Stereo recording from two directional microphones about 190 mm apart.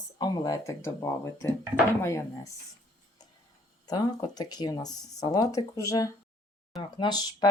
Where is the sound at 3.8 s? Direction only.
20° left (ahead or behind).